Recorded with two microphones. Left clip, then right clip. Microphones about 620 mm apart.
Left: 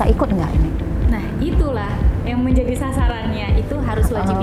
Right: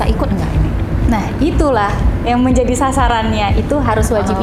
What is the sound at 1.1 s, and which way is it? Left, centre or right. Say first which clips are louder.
A woman's voice: right 8 dB; right.